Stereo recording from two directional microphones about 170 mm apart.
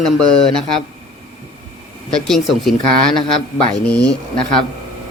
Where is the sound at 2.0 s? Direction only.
5° left (ahead or behind).